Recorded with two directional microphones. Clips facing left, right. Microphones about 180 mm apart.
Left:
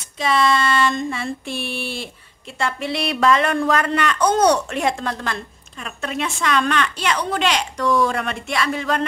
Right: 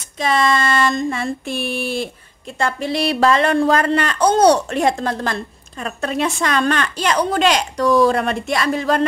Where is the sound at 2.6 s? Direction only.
40° right (ahead or behind).